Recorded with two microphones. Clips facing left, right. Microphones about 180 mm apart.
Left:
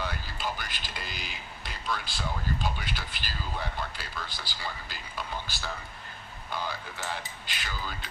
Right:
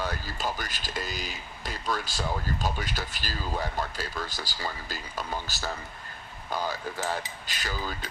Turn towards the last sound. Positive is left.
turn(degrees=-40)  # may be behind; listen again after turning